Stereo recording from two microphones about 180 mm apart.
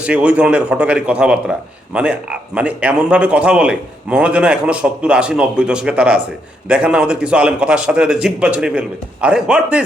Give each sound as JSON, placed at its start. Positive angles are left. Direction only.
{"t": 0.0, "sound": "a man's voice", "side_deg": -5}